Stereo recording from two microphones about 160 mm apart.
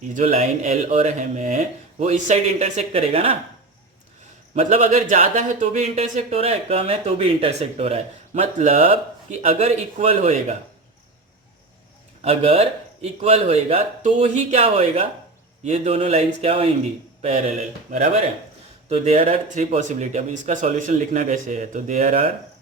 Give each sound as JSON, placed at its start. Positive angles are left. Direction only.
{"t": 0.1, "sound": "speech", "side_deg": -45}
{"t": 4.5, "sound": "speech", "side_deg": -50}
{"t": 12.2, "sound": "speech", "side_deg": -40}
{"t": 18.9, "sound": "speech", "side_deg": -40}